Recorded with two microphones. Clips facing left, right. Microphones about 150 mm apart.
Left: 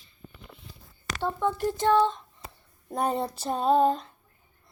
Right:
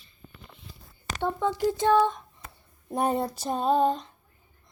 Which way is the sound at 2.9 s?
5° right (ahead or behind).